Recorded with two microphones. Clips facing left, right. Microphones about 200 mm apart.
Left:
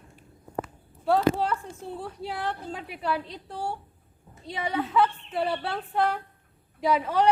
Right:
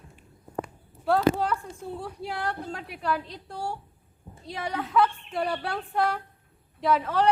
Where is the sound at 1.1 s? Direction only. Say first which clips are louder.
Even; centre (ahead or behind).